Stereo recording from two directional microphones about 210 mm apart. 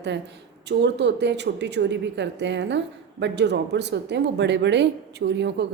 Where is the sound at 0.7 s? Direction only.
55° right (ahead or behind).